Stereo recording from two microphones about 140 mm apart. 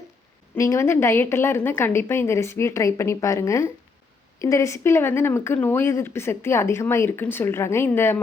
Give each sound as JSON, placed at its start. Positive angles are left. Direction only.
{"t": 0.5, "sound": "a woman's voice", "side_deg": 20}